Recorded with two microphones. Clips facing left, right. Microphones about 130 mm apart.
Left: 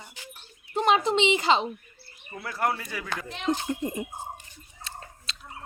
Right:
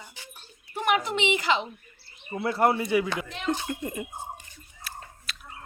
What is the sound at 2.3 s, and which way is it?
Speech, 25° right (ahead or behind).